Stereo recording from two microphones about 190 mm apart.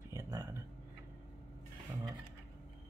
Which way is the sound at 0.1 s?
15° right (ahead or behind).